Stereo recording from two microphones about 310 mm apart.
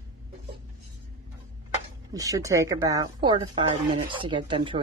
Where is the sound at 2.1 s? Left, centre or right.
Centre.